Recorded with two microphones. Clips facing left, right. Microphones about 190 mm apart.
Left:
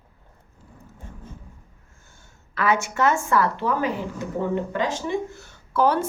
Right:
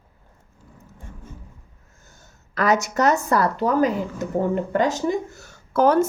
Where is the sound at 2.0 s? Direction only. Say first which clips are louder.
Right 4 dB; 40° right (ahead or behind).